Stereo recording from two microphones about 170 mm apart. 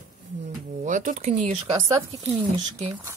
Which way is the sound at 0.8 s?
50° right (ahead or behind).